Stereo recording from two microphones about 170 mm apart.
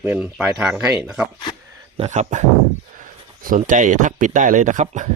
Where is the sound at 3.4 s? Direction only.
50° right (ahead or behind).